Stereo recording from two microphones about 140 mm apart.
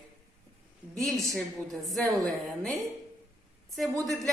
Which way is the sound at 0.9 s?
Centre (ahead or behind).